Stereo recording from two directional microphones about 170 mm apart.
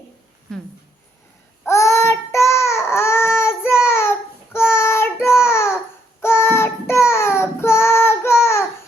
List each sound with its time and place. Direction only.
1.6 s child singing: 15° left (ahead or behind)